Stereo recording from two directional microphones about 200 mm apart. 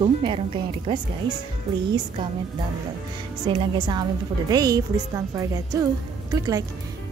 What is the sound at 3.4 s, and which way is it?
A woman's voice, 25° right (ahead or behind).